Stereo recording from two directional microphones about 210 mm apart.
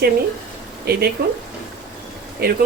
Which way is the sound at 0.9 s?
50° right (ahead or behind).